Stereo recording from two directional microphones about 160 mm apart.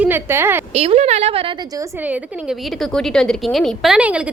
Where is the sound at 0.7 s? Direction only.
40° right (ahead or behind).